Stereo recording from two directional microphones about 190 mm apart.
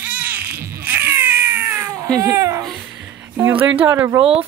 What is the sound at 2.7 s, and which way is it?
Music, 5° right (ahead or behind).